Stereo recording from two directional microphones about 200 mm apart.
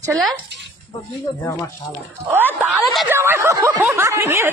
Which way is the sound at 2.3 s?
10° right (ahead or behind).